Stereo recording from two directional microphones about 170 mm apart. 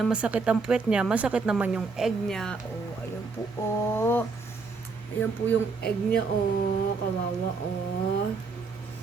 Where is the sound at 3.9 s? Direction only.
10° left (ahead or behind).